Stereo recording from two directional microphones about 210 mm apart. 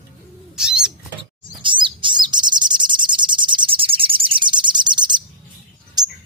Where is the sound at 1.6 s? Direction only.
25° right (ahead or behind).